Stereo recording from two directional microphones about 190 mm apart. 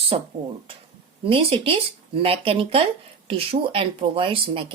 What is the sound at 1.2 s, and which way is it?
A woman's voice, 30° right (ahead or behind).